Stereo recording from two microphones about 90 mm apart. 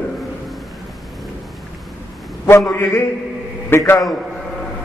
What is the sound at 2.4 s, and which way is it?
A man's voice, 30° left (ahead or behind).